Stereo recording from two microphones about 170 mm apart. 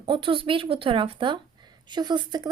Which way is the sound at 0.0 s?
30° right (ahead or behind).